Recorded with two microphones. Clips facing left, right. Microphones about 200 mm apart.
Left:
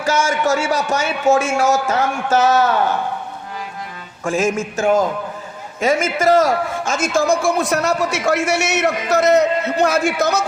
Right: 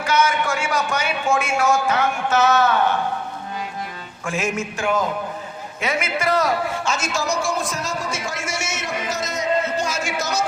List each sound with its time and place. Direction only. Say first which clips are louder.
0.0 s a man's voice: left 2 dB; 45° left (ahead or behind)
4.2 s a man's voice: left 6 dB; 40° left (ahead or behind); by 10.4 s 60° left (ahead or behind)